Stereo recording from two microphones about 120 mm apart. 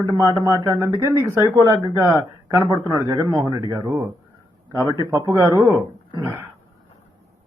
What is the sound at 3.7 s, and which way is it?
Speech, 15° right (ahead or behind).